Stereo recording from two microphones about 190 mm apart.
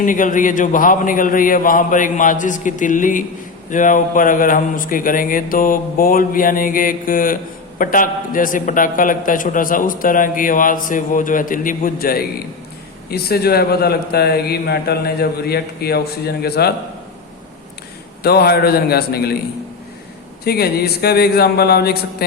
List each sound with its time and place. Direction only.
0.0 s a man's voice: 45° left (ahead or behind)
18.2 s a man's voice: 55° left (ahead or behind)
20.4 s a man's voice: 55° left (ahead or behind)